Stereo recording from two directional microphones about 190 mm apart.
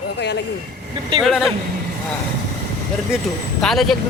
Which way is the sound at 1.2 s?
Centre (ahead or behind).